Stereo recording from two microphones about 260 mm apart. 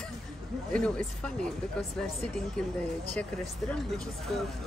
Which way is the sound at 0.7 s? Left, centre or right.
Centre.